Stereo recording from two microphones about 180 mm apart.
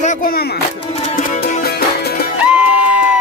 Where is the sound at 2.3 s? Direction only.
5° right (ahead or behind).